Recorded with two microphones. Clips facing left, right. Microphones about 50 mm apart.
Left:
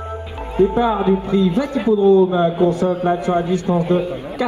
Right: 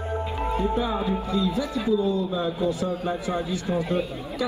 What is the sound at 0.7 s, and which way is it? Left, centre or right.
A man's voice, left.